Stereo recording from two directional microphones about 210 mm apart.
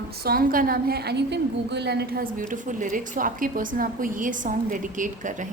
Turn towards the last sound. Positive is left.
turn(degrees=-40)  # may be behind; listen again after turning